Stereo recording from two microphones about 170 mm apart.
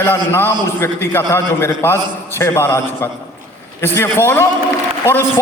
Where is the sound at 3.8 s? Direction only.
15° left (ahead or behind).